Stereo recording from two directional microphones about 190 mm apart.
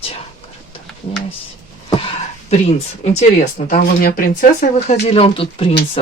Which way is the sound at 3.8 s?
50° left (ahead or behind).